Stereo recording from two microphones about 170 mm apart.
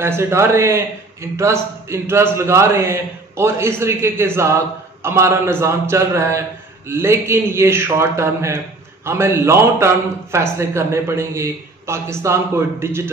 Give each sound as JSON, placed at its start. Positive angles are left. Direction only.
{"t": 0.0, "sound": "a man's voice", "side_deg": -15}